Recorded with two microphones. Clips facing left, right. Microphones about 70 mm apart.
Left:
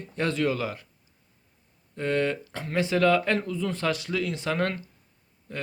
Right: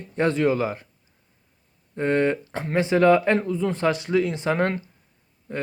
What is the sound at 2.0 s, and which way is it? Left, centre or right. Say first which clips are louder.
Speech: right 5 dB; right.